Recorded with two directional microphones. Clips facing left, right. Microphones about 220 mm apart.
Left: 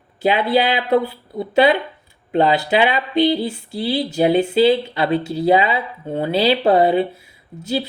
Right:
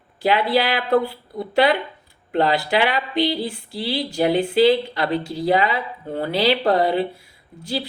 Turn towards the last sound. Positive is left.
turn(degrees=25)  # may be behind; listen again after turning